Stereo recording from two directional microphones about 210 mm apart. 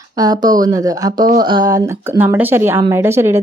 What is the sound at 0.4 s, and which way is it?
A woman's voice, 20° right (ahead or behind).